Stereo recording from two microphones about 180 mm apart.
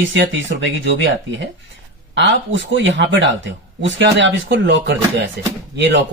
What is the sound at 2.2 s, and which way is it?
Speech, 85° right.